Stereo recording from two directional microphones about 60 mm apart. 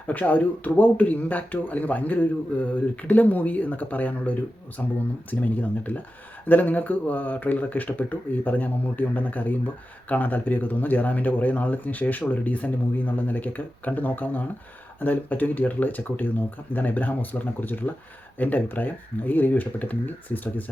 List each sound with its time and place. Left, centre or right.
0.1 s speech: left